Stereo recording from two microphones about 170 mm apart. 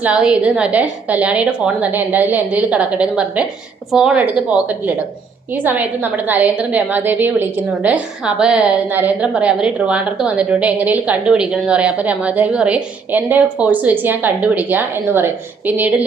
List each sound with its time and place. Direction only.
0.0 s a woman's voice: 5° right (ahead or behind)